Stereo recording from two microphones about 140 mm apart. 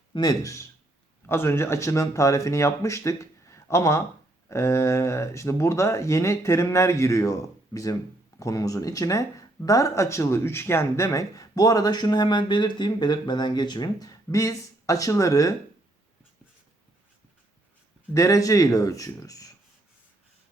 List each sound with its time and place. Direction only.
0.1 s speech: 30° left (ahead or behind)
18.1 s speech: 25° left (ahead or behind)